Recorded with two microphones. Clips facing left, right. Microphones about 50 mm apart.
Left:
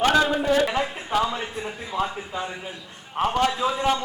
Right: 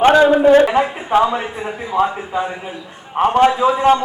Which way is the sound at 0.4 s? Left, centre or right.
Right.